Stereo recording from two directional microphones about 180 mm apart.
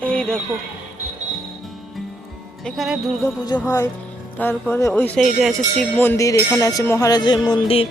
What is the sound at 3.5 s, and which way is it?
Speech, 15° left (ahead or behind).